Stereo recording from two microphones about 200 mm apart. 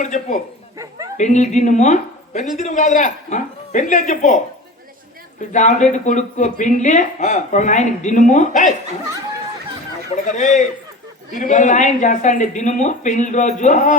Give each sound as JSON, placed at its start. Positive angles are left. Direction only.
{"t": 0.0, "sound": "a woman's voice", "side_deg": 40}
{"t": 5.5, "sound": "a woman's voice", "side_deg": 35}
{"t": 10.3, "sound": "a woman's voice", "side_deg": 35}